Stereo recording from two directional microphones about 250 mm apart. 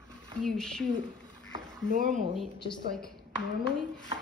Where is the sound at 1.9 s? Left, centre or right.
Right.